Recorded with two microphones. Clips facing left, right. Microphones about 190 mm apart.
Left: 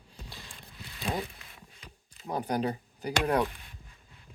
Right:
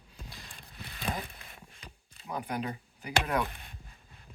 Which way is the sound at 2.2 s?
35° left (ahead or behind).